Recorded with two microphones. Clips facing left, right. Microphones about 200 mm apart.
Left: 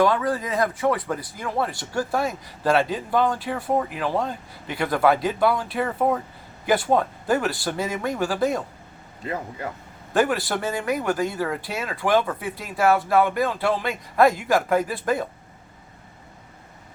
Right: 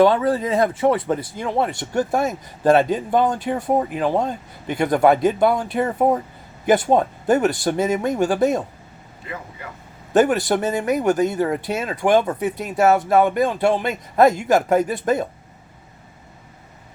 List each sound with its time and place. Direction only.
0.0 s speech: 25° right (ahead or behind)
10.2 s speech: 20° right (ahead or behind)